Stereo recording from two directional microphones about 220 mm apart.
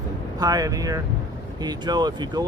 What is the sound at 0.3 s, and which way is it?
Speech, 15° right (ahead or behind).